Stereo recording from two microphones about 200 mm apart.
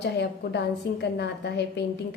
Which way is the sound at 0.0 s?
60° left (ahead or behind).